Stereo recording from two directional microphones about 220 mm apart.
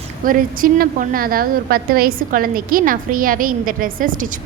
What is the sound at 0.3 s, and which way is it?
A woman's voice, 40° right (ahead or behind).